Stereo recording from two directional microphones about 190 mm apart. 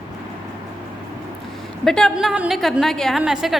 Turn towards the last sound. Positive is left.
turn(degrees=0)  # may be behind; listen again after turning